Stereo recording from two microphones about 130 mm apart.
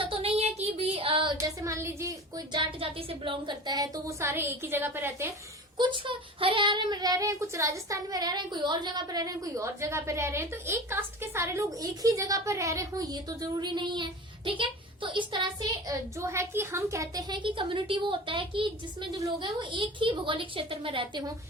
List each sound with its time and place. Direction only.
0.0 s child singing: 45° right (ahead or behind)
1.6 s a sound: 20° right (ahead or behind)
2.5 s speech: 40° right (ahead or behind); by 5.3 s 15° right (ahead or behind)
5.7 s a woman's voice: 40° right (ahead or behind)